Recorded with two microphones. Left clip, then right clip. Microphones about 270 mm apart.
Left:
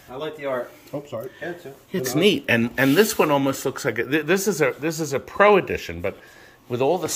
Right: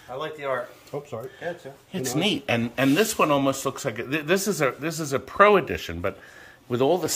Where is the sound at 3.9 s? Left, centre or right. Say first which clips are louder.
Left 6 dB; right.